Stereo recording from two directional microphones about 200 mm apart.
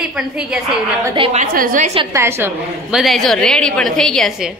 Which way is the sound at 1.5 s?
40° right (ahead or behind).